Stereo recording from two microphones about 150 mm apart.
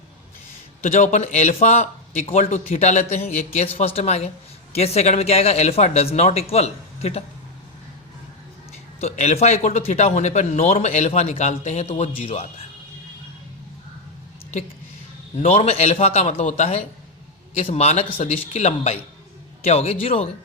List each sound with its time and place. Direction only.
0.8 s a man's voice: 55° left (ahead or behind)
9.0 s a man's voice: 50° left (ahead or behind)
15.4 s a man's voice: 45° left (ahead or behind)